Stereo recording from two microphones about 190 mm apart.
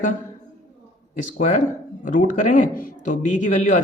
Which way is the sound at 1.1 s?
40° left (ahead or behind).